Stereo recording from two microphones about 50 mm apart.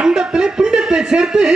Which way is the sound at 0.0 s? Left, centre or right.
Centre.